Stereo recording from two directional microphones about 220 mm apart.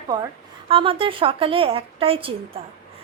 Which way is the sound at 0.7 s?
25° right (ahead or behind).